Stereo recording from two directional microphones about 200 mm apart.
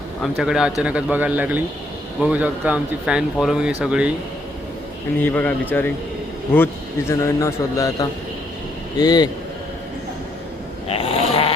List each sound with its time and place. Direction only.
0.2 s speech: centre (ahead or behind)
5.2 s a man's voice: 10° left (ahead or behind)
10.8 s snoring: 30° left (ahead or behind)